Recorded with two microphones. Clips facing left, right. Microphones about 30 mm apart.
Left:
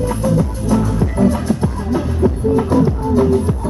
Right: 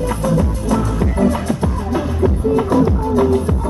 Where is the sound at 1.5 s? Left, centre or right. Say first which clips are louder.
Left 1 dB; right.